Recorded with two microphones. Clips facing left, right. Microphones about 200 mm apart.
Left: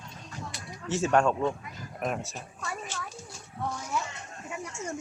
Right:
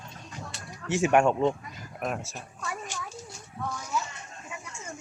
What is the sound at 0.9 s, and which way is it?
Speech, 15° right (ahead or behind).